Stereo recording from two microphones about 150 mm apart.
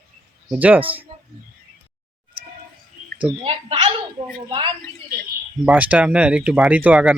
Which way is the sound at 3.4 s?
40° right (ahead or behind).